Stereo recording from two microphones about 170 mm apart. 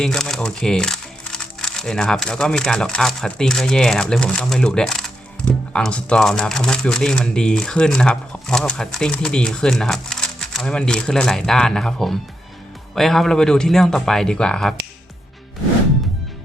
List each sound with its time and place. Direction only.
0.0 s speech: 5° left (ahead or behind)